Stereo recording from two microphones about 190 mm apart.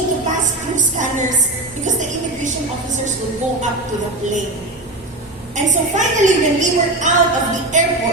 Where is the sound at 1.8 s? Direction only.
40° right (ahead or behind).